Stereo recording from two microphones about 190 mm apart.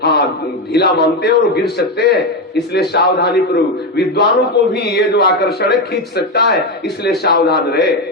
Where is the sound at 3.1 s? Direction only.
60° left (ahead or behind).